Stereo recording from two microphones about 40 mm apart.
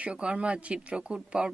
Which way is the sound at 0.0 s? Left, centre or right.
Right.